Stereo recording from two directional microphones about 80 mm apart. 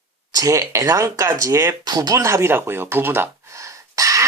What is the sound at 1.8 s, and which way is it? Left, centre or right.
Speech, right.